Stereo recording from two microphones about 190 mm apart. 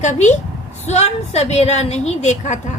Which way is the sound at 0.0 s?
40° left (ahead or behind).